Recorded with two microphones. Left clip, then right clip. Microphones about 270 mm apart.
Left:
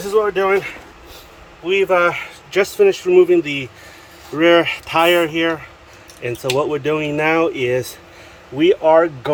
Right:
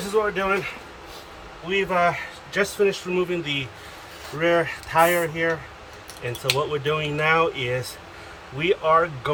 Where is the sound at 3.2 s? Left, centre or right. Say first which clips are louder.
Left 12 dB; left.